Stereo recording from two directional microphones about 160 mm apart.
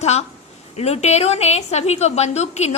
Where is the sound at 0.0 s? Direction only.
40° left (ahead or behind).